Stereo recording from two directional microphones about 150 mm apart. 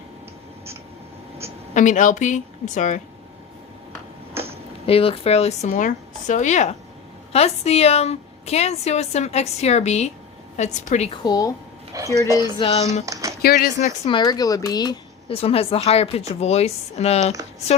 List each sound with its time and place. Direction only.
1.7 s a woman's voice: 55° left (ahead or behind)
4.9 s a woman's voice: 40° left (ahead or behind)
11.2 s speech: 25° left (ahead or behind)
11.9 s speech: 25° right (ahead or behind)
12.4 s a sound: 35° left (ahead or behind)
13.4 s speech: 80° left
13.7 s a woman's voice: 50° left (ahead or behind)
14.1 s speech: 30° left (ahead or behind)
15.4 s a woman's voice: 40° left (ahead or behind)